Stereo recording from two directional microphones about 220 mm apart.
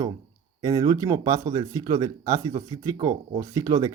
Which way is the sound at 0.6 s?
15° right (ahead or behind).